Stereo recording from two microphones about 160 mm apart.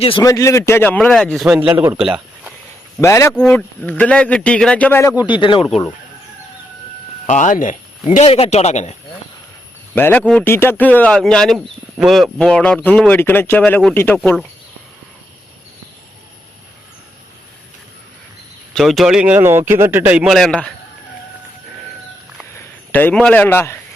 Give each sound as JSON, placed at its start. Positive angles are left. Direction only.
{"t": 0.2, "sound": "speech", "side_deg": 20}
{"t": 1.5, "sound": "a man's voice", "side_deg": -10}
{"t": 3.0, "sound": "speech", "side_deg": 15}
{"t": 3.3, "sound": "speech", "side_deg": 5}
{"t": 7.3, "sound": "a man's voice", "side_deg": 50}
{"t": 9.9, "sound": "speech", "side_deg": 10}
{"t": 18.7, "sound": "a man's voice", "side_deg": 0}
{"t": 22.9, "sound": "speech", "side_deg": 10}